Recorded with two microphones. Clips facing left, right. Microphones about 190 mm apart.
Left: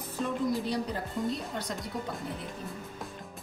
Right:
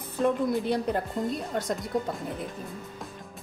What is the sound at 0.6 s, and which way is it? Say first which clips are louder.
Speech: right 5 dB; 55° right (ahead or behind).